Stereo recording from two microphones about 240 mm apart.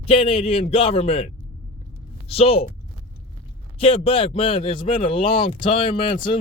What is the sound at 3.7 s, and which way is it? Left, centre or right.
A man's voice, left.